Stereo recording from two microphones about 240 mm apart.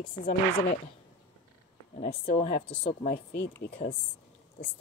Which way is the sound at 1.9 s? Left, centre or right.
Left.